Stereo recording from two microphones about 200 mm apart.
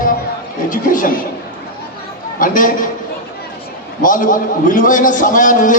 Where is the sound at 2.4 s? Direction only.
45° left (ahead or behind).